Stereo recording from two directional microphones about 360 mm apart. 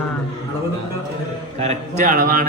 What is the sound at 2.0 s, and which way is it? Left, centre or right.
Speech, right.